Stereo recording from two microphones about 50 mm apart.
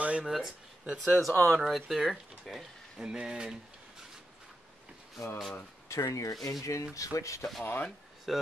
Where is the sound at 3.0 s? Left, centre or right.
Centre.